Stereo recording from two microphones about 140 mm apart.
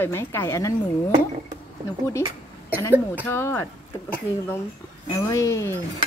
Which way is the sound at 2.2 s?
15° right (ahead or behind).